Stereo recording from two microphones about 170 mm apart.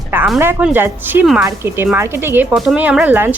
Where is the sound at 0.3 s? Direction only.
10° right (ahead or behind).